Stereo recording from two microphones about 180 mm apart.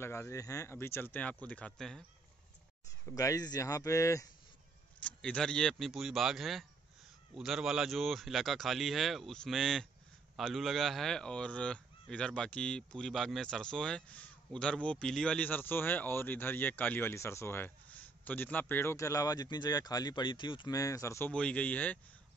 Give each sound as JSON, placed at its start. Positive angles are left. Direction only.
{"t": 0.0, "sound": "speech", "side_deg": 15}
{"t": 3.1, "sound": "speech", "side_deg": 20}
{"t": 5.0, "sound": "speech", "side_deg": 5}